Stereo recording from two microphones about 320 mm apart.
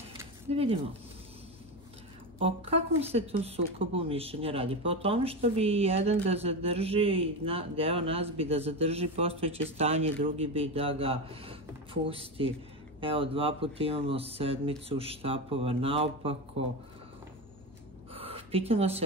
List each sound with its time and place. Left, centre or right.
0.5 s speech: centre
2.3 s speech: centre
18.1 s a sound: centre